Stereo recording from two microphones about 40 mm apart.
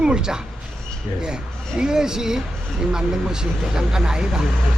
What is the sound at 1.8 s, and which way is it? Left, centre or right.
Speech, centre.